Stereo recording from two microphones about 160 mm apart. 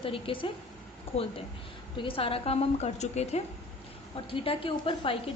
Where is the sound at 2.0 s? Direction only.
35° left (ahead or behind).